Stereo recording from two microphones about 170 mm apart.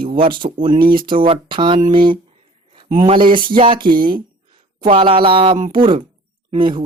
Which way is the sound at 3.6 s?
30° right (ahead or behind).